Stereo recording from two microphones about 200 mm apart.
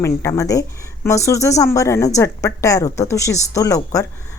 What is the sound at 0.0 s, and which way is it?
A woman's voice, 15° left (ahead or behind).